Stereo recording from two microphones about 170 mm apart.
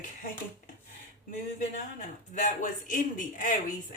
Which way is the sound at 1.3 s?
45° left (ahead or behind).